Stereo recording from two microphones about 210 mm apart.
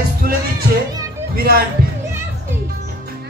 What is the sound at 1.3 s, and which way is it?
Speech, 45° right (ahead or behind).